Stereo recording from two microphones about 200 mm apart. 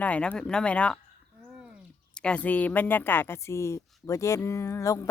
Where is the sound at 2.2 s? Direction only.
5° left (ahead or behind).